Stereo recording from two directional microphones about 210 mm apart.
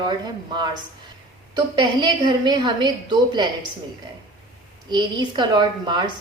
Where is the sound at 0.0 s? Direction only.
20° right (ahead or behind).